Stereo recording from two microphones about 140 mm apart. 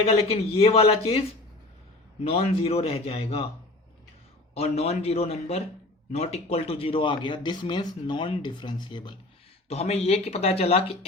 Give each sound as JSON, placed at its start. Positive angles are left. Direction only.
{"t": 0.0, "sound": "speech", "side_deg": 45}
{"t": 2.2, "sound": "speech", "side_deg": 45}
{"t": 4.5, "sound": "speech", "side_deg": 50}
{"t": 9.6, "sound": "speech", "side_deg": 50}